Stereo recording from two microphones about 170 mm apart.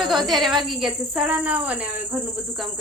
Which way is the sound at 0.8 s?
5° right (ahead or behind).